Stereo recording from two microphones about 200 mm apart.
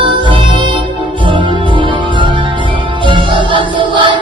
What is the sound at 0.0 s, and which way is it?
Music, 25° right (ahead or behind).